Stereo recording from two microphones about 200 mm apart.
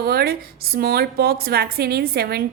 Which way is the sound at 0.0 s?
50° right (ahead or behind).